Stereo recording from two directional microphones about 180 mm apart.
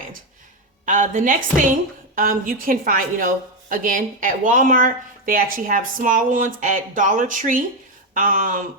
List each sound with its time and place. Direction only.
0.9 s a woman's voice: 45° right (ahead or behind)